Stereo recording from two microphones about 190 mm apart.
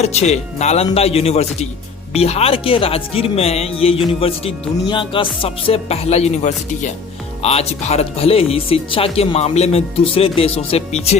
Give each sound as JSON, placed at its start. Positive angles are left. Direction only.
{"t": 0.0, "sound": "speech", "side_deg": 35}